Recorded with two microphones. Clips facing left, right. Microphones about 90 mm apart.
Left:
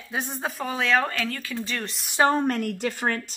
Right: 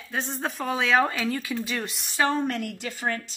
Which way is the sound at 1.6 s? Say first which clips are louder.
Right 1 dB; 5° right (ahead or behind).